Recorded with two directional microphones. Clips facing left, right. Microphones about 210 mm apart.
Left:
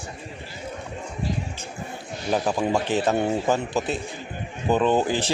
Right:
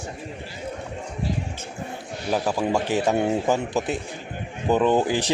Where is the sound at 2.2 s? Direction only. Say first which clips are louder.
Even; 5° right (ahead or behind).